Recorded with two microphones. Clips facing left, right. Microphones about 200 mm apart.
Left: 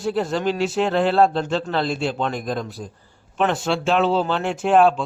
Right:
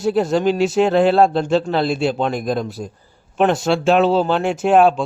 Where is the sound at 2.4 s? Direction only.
35° right (ahead or behind).